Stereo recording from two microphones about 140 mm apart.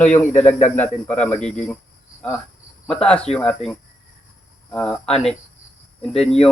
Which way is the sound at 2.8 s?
5° left (ahead or behind).